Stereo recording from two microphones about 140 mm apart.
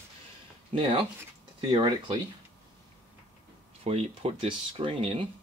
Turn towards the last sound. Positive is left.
turn(degrees=-40)  # may be behind; listen again after turning